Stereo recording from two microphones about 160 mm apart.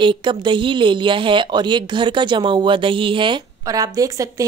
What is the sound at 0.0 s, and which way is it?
Speech, 30° right (ahead or behind).